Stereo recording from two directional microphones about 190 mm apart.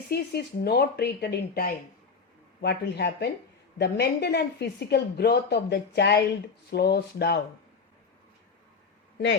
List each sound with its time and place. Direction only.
0.1 s a woman's voice: 55° left (ahead or behind)